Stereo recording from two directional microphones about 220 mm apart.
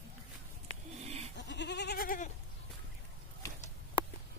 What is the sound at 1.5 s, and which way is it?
Goat, 50° left (ahead or behind).